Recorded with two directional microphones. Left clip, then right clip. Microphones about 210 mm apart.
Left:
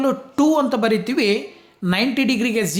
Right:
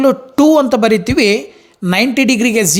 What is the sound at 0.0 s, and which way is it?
Speech, 30° right (ahead or behind).